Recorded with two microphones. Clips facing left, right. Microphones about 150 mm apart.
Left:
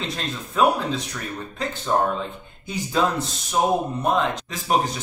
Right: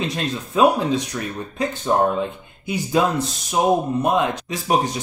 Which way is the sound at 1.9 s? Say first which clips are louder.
Right 3 dB; 15° right (ahead or behind).